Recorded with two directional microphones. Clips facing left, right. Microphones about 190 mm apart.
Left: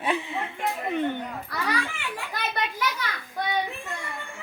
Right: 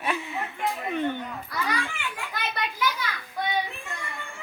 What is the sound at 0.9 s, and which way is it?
Speech, 15° left (ahead or behind).